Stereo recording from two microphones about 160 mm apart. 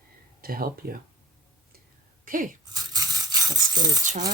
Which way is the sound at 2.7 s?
25° right (ahead or behind).